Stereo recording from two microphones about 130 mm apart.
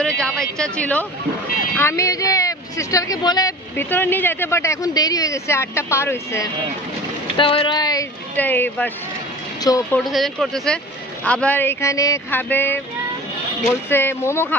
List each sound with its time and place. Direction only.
0.0 s a sound: 5° left (ahead or behind)
1.8 s speech: 20° left (ahead or behind)
3.7 s speech: 15° left (ahead or behind)
7.3 s speech: 40° left (ahead or behind)
8.4 s speech: 15° left (ahead or behind)
9.6 s speech: 30° left (ahead or behind)
10.0 s speech: centre (ahead or behind)
13.8 s speech: 15° left (ahead or behind)